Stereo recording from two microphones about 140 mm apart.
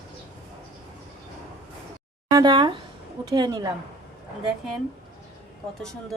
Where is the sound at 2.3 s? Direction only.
30° right (ahead or behind).